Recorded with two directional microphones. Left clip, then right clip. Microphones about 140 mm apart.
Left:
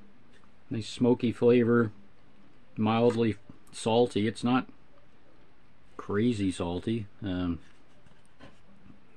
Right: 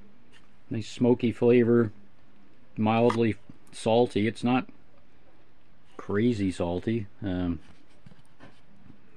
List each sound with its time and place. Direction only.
0.7 s speech: 25° right (ahead or behind)
5.9 s speech: 25° right (ahead or behind)